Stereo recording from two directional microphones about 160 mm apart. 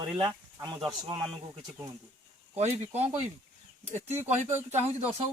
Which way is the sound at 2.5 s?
45° right (ahead or behind).